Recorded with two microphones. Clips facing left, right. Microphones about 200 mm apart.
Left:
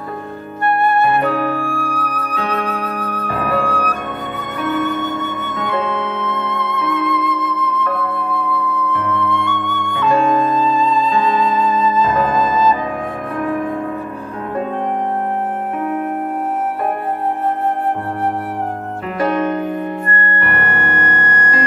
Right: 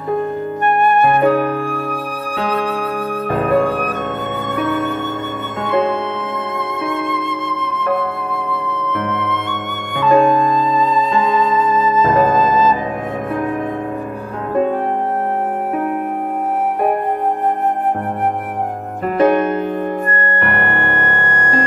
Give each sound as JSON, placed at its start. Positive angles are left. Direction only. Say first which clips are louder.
{"t": 0.7, "sound": "flute", "louder": "right 1 dB", "side_deg": -15}
{"t": 4.6, "sound": "music", "louder": "left 1 dB", "side_deg": -25}
{"t": 9.4, "sound": "flute", "louder": "left 3 dB", "side_deg": -20}
{"t": 20.1, "sound": "music", "louder": "right 2 dB", "side_deg": -20}